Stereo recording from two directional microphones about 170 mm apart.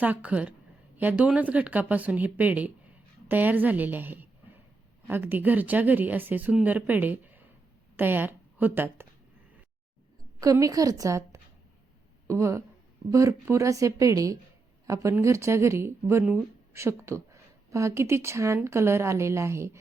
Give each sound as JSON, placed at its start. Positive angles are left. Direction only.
{"t": 0.0, "sound": "speech", "side_deg": -10}
{"t": 10.4, "sound": "a woman's voice", "side_deg": -20}